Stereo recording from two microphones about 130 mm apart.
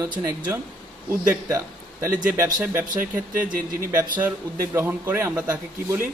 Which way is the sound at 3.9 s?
15° right (ahead or behind).